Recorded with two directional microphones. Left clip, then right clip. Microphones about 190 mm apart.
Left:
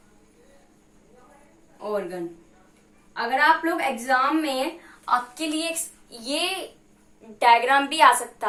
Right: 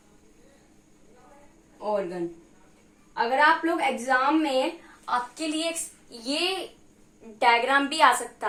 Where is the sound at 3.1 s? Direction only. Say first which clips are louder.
Left 1 dB; 20° right (ahead or behind).